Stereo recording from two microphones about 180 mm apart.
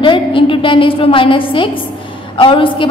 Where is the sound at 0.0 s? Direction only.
30° left (ahead or behind).